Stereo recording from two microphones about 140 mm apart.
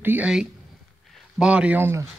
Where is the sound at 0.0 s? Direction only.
10° right (ahead or behind).